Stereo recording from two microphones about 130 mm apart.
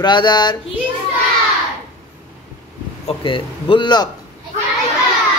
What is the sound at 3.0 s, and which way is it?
A man's voice, 40° left (ahead or behind).